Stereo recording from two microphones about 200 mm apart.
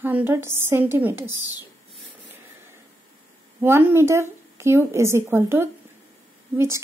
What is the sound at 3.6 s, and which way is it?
A woman's voice, 10° right (ahead or behind).